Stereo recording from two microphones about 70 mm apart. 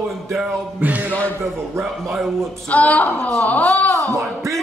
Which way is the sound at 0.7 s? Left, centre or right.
Right.